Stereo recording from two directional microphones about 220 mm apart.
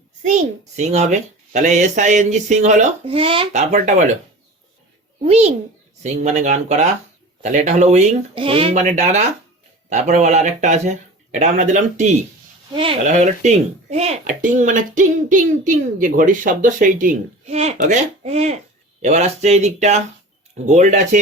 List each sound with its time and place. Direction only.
0.2 s speech: 35° right (ahead or behind)
5.2 s a child's voice: 30° right (ahead or behind)